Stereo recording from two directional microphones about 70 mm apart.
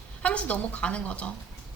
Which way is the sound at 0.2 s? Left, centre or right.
Centre.